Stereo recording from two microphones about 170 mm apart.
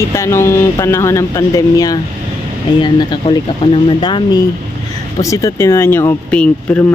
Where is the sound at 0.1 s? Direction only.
15° left (ahead or behind).